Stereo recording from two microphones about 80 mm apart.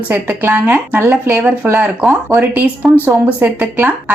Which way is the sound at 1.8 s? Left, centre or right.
Centre.